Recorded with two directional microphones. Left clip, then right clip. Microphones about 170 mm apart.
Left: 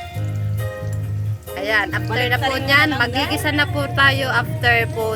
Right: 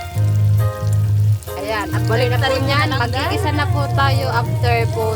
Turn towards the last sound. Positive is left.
turn(degrees=20)  # may be behind; listen again after turning